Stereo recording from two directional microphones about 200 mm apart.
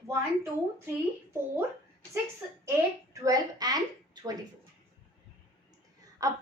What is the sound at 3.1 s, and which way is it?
A woman's voice, 15° right (ahead or behind).